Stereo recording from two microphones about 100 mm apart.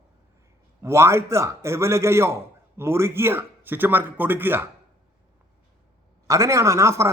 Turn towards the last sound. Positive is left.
turn(degrees=-30)  # may be behind; listen again after turning